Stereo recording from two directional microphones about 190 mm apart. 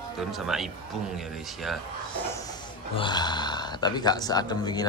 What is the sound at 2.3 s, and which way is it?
Speech, 15° left (ahead or behind).